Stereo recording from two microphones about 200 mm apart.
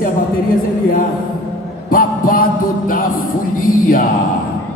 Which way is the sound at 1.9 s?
45° left (ahead or behind).